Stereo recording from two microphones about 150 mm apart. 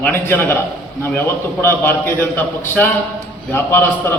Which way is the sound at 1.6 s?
15° left (ahead or behind).